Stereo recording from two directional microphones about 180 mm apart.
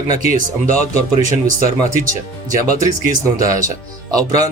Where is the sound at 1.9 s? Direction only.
50° right (ahead or behind).